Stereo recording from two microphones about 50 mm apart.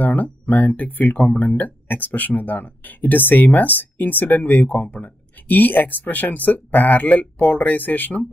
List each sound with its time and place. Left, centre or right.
0.0 s speech: left